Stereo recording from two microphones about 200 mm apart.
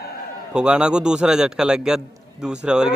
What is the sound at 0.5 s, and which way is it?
A man's voice, 5° right (ahead or behind).